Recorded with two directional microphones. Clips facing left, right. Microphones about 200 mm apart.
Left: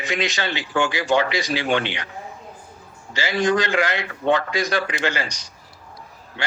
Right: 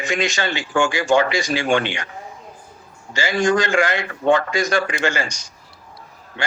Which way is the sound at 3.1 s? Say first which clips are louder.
Right 2 dB; 45° right (ahead or behind).